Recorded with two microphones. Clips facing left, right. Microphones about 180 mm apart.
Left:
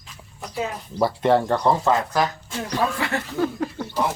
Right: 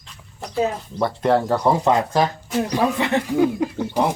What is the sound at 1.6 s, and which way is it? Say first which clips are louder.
Speech: right 2 dB; 15° right (ahead or behind).